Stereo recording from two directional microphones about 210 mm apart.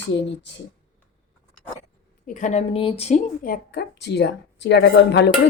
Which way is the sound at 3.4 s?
45° left (ahead or behind).